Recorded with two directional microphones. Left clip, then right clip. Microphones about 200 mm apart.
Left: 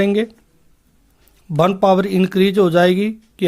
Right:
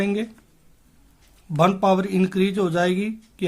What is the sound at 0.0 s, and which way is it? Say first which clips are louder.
Speech: left 8 dB; 35° left (ahead or behind).